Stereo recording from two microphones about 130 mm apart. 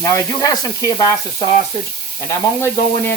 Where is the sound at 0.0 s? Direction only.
30° left (ahead or behind).